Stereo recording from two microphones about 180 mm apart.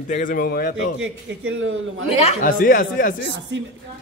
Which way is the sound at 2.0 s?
35° left (ahead or behind).